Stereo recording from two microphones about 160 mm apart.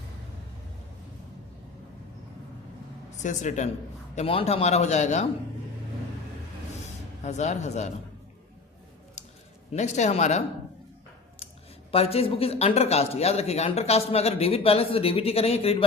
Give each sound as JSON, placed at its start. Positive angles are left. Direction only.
{"t": 3.2, "sound": "a man's voice", "side_deg": 50}
{"t": 4.1, "sound": "a man's voice", "side_deg": 40}
{"t": 7.3, "sound": "a man's voice", "side_deg": 45}
{"t": 9.7, "sound": "a man's voice", "side_deg": 45}
{"t": 11.9, "sound": "speech", "side_deg": 40}